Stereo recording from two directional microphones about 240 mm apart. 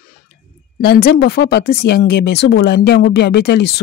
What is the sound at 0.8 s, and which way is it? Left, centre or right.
Speech, left.